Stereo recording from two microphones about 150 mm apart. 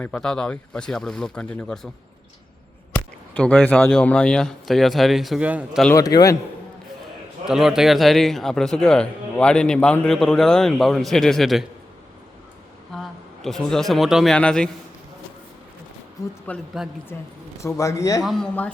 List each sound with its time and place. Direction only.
0.0 s a man's voice: 5° left (ahead or behind)
2.9 s a man's voice: 10° left (ahead or behind); by 5.8 s 10° right (ahead or behind)
5.9 s speech: 25° left (ahead or behind)
7.4 s a man's voice: 5° right (ahead or behind)
12.9 s a man's voice: centre (ahead or behind)
16.5 s a man's voice: 10° left (ahead or behind)
18.2 s a man's voice: centre (ahead or behind)